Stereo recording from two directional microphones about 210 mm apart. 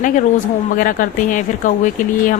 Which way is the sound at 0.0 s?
40° left (ahead or behind).